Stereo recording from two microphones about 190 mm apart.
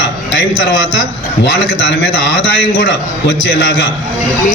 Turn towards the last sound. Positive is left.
turn(degrees=70)  # may be behind; listen again after turning